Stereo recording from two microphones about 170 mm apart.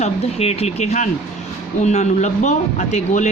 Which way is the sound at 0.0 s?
40° left (ahead or behind).